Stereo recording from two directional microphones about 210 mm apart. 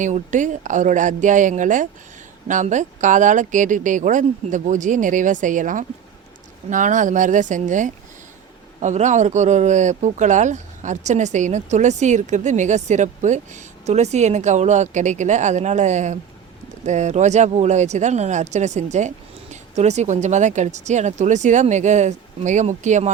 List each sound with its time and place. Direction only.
0.0 s speech: 35° right (ahead or behind)